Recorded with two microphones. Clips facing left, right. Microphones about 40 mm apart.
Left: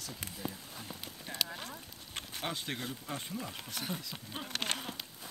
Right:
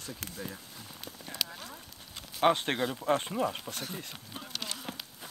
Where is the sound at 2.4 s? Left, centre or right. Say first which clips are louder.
Right 13 dB; right.